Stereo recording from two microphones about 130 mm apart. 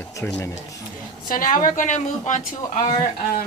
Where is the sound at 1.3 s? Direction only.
90° left; by 2.4 s 70° left (ahead or behind).